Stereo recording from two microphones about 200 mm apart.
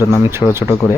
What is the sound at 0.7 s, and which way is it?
Speech, 15° left (ahead or behind).